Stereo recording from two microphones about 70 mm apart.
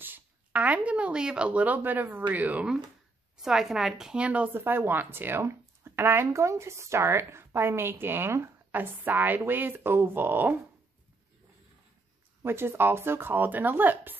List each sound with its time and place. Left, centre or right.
0.0 s speech: right
3.4 s a woman's voice: centre
4.6 s speech: right
8.7 s speech: right
12.4 s speech: right